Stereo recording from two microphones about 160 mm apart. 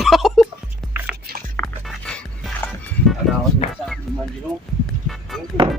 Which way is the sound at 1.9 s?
5° left (ahead or behind).